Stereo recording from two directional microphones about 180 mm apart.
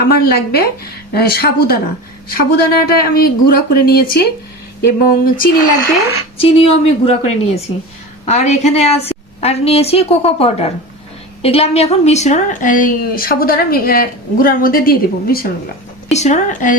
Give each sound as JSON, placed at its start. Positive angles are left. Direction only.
{"t": 0.1, "sound": "a woman's voice", "side_deg": 60}
{"t": 6.3, "sound": "a woman's voice", "side_deg": 30}
{"t": 16.1, "sound": "a woman's voice", "side_deg": 40}